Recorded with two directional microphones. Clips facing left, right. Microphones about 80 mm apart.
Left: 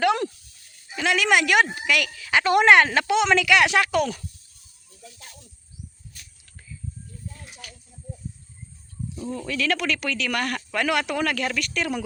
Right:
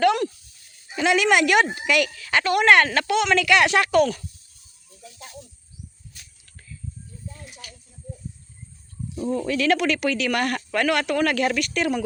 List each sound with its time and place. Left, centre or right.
0.9 s speech: centre
2.4 s speech: left
3.4 s speech: centre
9.1 s speech: centre